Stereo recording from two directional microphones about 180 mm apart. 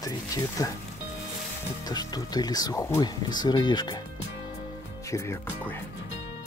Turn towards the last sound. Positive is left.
turn(degrees=15)  # may be behind; listen again after turning